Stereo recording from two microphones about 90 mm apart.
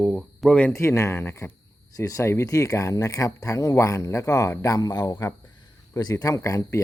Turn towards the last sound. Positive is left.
turn(degrees=35)  # may be behind; listen again after turning